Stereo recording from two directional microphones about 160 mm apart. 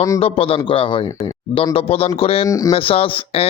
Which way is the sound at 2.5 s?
20° left (ahead or behind).